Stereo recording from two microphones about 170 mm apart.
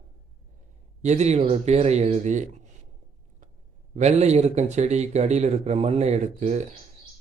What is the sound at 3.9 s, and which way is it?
Speech, 40° right (ahead or behind).